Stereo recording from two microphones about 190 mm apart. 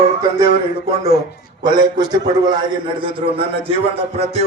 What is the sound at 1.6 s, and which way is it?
A man's voice, 20° right (ahead or behind).